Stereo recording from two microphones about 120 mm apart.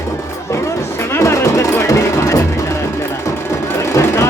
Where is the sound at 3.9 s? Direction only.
25° left (ahead or behind).